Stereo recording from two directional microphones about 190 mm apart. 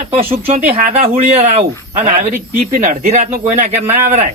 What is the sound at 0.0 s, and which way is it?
Speech, 45° right (ahead or behind).